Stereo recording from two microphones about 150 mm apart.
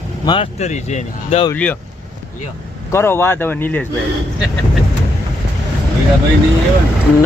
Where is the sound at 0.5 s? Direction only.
50° left (ahead or behind).